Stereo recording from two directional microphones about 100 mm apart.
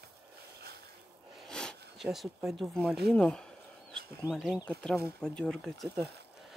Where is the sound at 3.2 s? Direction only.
10° left (ahead or behind).